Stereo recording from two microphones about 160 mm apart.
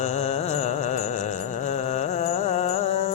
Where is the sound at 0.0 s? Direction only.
45° left (ahead or behind).